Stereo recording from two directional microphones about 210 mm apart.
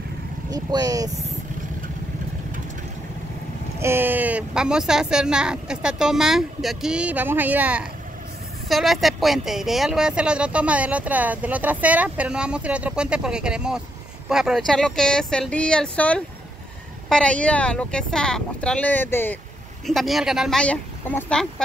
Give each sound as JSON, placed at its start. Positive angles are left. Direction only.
{"t": 0.5, "sound": "speech", "side_deg": -20}
{"t": 3.8, "sound": "speech", "side_deg": -10}